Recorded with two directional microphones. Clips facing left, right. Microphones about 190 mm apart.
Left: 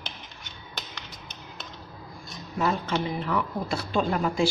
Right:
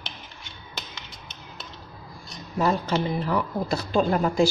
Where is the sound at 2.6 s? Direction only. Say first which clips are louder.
Right 3 dB; 35° right (ahead or behind).